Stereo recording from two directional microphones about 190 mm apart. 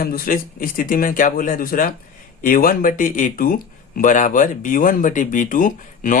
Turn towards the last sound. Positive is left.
turn(degrees=45)  # may be behind; listen again after turning